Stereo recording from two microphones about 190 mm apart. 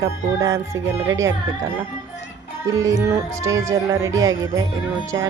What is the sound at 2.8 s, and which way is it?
Music, 15° right (ahead or behind).